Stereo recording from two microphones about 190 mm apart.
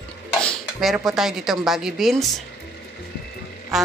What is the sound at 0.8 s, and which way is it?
A woman's voice, centre (ahead or behind).